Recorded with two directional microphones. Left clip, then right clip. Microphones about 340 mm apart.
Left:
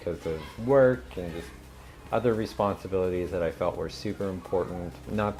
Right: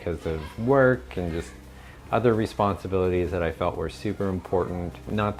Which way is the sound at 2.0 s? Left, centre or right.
Centre.